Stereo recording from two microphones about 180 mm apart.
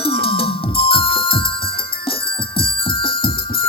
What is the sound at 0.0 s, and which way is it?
Music, 30° left (ahead or behind).